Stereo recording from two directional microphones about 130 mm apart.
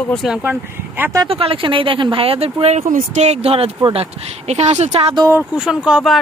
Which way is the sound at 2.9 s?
75° right (ahead or behind).